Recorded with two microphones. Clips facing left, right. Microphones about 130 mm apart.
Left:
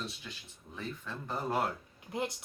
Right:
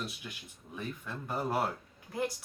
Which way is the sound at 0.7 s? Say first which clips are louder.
Right 1 dB; 10° right (ahead or behind).